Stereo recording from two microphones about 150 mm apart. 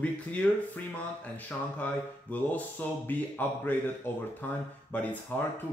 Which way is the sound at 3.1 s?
10° left (ahead or behind).